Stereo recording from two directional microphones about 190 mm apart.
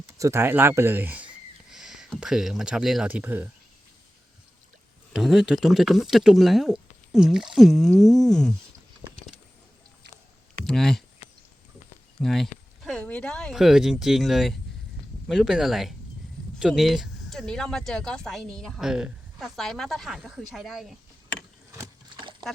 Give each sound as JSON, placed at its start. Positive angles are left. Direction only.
{"t": 0.2, "sound": "speech", "side_deg": -15}
{"t": 5.1, "sound": "speech", "side_deg": 0}
{"t": 10.7, "sound": "speech", "side_deg": 0}
{"t": 12.2, "sound": "speech", "side_deg": 0}
{"t": 21.7, "sound": "a sound", "side_deg": -20}